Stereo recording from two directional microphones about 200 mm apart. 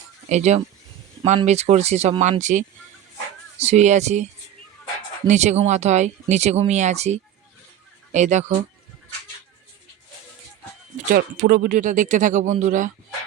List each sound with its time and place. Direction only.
0.3 s speech: 35° right (ahead or behind)
5.3 s speech: 35° right (ahead or behind)
10.9 s speech: 45° right (ahead or behind)